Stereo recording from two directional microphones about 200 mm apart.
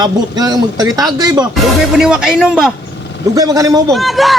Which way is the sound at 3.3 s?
15° right (ahead or behind).